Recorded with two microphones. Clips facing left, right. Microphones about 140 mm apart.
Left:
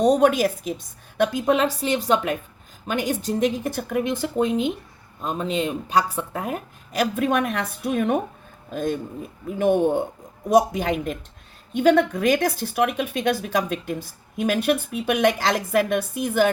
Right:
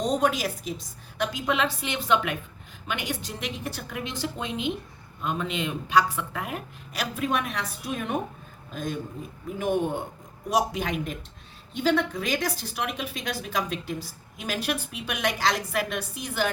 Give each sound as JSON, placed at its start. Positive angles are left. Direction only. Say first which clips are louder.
{"t": 0.0, "sound": "speech", "louder": "left 8 dB", "side_deg": 55}
{"t": 11.8, "sound": "speech", "louder": "left 7 dB", "side_deg": 55}